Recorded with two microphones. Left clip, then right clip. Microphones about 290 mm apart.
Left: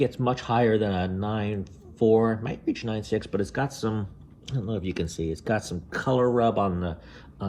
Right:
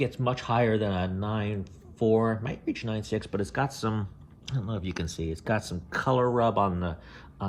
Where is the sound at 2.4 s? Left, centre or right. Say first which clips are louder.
Left 3 dB; centre.